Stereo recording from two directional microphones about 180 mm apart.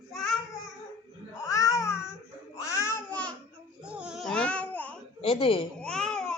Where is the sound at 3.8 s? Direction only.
5° right (ahead or behind).